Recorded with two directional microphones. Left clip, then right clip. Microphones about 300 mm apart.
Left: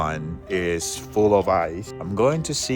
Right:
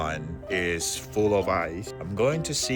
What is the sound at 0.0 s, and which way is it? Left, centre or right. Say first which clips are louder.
Music: left 4 dB; centre.